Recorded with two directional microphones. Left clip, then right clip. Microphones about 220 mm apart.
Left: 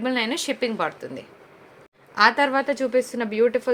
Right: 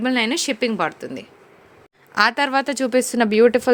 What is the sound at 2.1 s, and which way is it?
A woman's voice, 40° right (ahead or behind).